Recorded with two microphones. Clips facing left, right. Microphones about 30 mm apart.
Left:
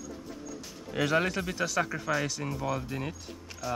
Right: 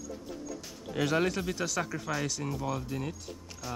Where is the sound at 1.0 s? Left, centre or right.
Centre.